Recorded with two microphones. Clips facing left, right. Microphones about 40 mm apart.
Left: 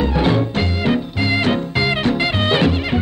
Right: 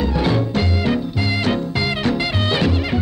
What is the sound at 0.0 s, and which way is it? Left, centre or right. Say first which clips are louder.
Music: left 2 dB; left.